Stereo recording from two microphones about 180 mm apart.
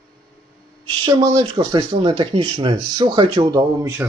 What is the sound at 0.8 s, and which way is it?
Speech, 20° right (ahead or behind).